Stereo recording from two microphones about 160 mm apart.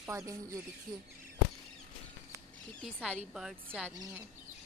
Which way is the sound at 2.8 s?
5° right (ahead or behind).